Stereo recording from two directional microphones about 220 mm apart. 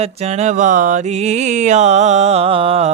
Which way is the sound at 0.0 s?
30° right (ahead or behind).